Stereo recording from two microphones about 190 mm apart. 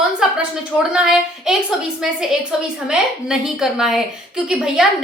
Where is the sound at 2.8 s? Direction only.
5° right (ahead or behind).